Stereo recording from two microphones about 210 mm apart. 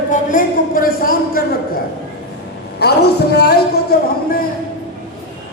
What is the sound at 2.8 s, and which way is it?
Speech, 50° left (ahead or behind).